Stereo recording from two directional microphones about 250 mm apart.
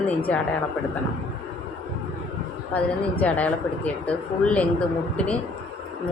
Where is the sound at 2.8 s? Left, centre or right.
Centre.